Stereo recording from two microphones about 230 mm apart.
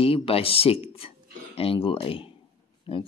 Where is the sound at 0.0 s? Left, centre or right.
Left.